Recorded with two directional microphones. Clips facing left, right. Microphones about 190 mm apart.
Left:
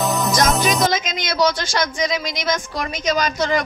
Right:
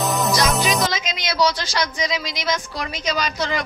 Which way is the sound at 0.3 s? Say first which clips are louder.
Left 3 dB; 50° left (ahead or behind).